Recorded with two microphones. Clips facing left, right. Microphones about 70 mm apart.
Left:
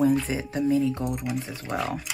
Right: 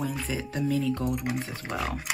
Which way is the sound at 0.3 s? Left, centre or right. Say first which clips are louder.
Left 4 dB; left.